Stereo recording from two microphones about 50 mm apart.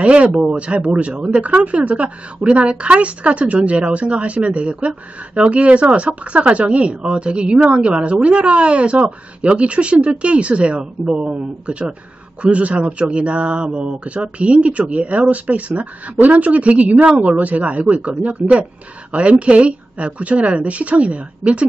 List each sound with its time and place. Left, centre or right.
0.0 s a woman's voice: right